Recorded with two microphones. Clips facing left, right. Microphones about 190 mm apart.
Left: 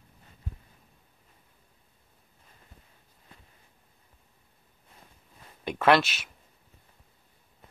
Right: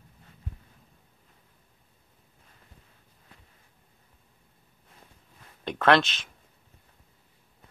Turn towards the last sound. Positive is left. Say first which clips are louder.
# even
turn(degrees=10)  # may be behind; listen again after turning